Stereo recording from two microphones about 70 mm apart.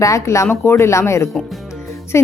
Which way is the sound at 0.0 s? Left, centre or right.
Left.